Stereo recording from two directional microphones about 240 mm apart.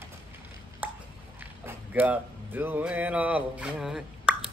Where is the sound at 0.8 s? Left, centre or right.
Centre.